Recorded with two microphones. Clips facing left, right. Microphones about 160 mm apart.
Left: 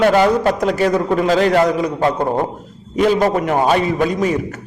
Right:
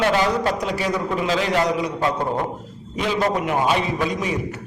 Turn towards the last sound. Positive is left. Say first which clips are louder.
# left 6 dB
turn(degrees=45)  # may be behind; listen again after turning